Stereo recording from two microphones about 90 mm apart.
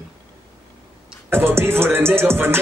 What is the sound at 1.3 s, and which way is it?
Music, 25° right (ahead or behind).